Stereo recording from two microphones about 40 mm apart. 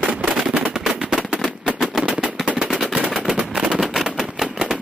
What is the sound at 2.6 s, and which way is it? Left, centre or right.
Machine gun, centre.